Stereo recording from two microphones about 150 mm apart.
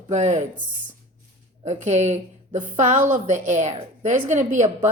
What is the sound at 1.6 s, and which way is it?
A woman's voice, 50° right (ahead or behind).